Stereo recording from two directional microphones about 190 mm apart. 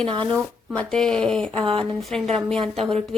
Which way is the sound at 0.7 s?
5° left (ahead or behind).